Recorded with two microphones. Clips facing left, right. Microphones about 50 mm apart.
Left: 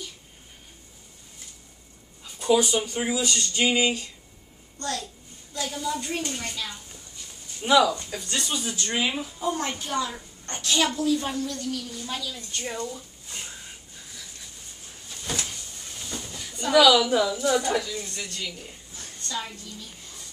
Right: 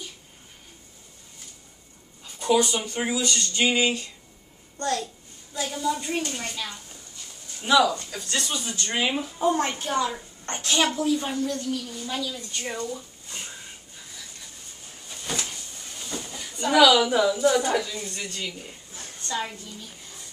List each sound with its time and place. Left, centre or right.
2.2 s speech: centre
4.7 s a child's voice: right
5.5 s a woman's voice: centre
7.6 s speech: centre
8.0 s speech: centre
8.8 s a woman's voice: centre
9.4 s a woman's voice: right
11.8 s speech: centre
15.0 s a sound: centre
17.1 s a woman's voice: centre
18.9 s a sound: right